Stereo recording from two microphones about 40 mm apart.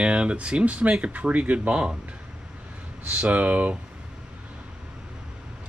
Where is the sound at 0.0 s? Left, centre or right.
Right.